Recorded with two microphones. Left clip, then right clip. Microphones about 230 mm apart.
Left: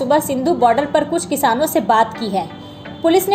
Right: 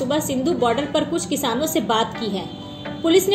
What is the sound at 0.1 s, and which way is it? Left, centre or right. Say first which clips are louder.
A woman's voice: left 9 dB; left.